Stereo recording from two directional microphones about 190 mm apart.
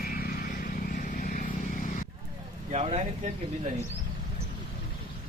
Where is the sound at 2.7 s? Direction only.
35° right (ahead or behind).